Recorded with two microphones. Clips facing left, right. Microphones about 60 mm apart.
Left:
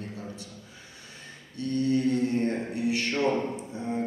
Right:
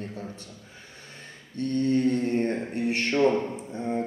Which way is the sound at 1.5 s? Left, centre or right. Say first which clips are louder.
Right 2 dB; right.